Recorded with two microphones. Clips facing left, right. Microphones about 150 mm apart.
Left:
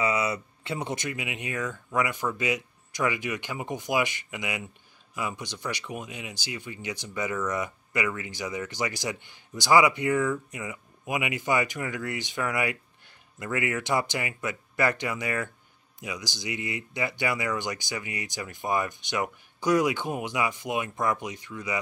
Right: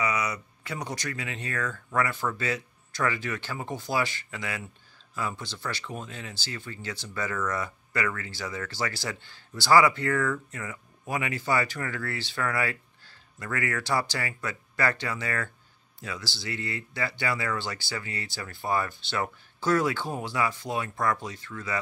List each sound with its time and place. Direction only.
0.0 s speech: 25° left (ahead or behind)